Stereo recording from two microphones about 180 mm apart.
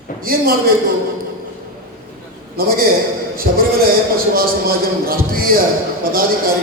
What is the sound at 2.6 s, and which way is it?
A man's voice, 55° right (ahead or behind).